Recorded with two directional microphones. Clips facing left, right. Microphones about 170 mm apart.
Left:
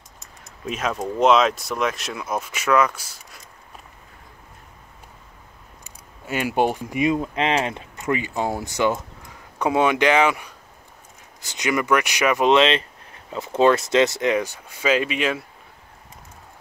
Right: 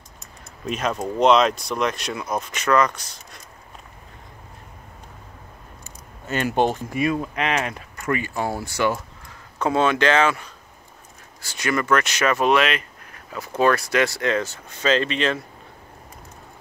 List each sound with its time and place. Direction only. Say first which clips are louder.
0.7 s speech: right 1 dB; centre (ahead or behind)
5.9 s speech: even; 10° left (ahead or behind)